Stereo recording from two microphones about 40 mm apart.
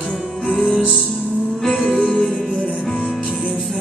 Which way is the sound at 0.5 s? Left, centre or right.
Left.